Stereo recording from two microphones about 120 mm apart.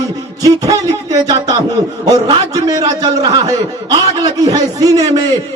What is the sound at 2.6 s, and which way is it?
A man's voice, 30° right (ahead or behind).